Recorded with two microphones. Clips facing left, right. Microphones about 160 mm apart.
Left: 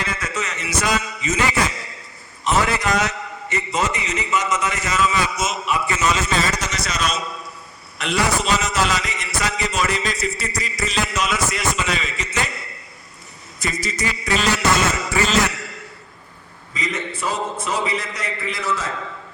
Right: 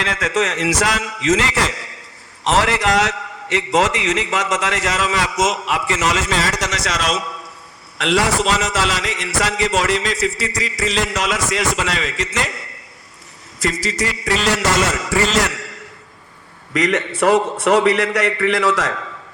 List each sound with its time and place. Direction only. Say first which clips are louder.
0.0 s a man's voice: right 7 dB; 90° right
13.6 s a man's voice: right 5 dB; 90° right
16.7 s a man's voice: right 9 dB; 75° right (ahead or behind)